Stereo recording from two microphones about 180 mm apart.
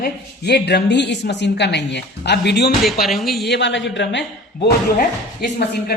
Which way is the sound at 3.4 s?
75° left (ahead or behind).